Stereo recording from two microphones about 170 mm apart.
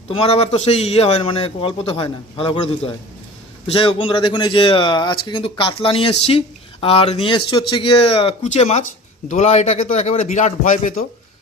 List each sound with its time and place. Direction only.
0.1 s a man's voice: 35° left (ahead or behind)